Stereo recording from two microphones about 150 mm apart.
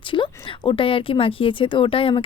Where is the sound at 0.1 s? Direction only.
30° left (ahead or behind).